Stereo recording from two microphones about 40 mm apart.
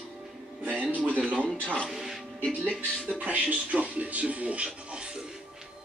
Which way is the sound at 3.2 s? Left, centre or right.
Right.